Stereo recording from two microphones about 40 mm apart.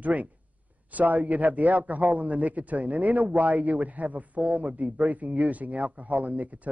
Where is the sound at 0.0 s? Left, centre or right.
Right.